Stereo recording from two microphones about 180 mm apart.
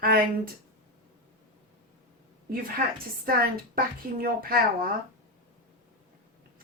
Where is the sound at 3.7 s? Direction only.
55° right (ahead or behind).